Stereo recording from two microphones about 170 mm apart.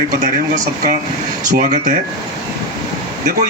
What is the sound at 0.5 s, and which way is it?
Speech, 45° right (ahead or behind).